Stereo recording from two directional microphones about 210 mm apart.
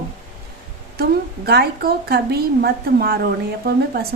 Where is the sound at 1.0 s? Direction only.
45° right (ahead or behind).